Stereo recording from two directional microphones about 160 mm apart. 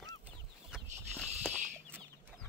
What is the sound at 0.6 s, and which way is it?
Chicken, centre (ahead or behind).